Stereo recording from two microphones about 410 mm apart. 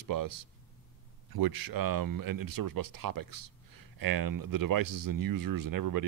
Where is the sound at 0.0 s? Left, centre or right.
Right.